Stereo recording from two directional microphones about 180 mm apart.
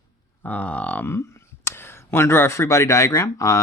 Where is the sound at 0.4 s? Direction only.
10° left (ahead or behind).